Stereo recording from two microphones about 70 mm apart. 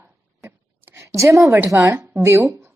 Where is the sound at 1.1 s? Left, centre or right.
Right.